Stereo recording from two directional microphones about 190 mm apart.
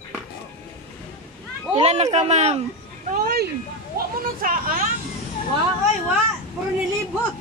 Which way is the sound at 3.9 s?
45° right (ahead or behind).